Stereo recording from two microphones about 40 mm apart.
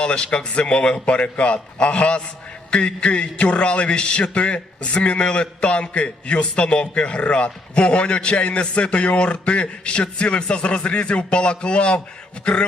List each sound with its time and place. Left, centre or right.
0.0 s a man's voice: left